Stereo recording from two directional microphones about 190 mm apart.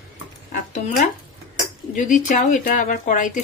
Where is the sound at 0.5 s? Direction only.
40° left (ahead or behind).